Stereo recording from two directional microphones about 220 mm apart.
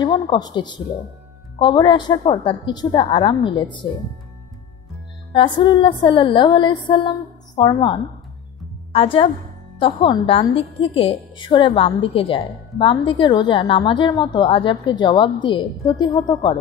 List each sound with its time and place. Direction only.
0.0 s a woman's voice: 20° left (ahead or behind)
5.3 s a woman's voice: 20° left (ahead or behind)